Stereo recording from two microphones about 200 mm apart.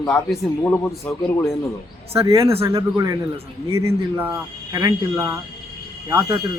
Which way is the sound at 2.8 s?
15° right (ahead or behind).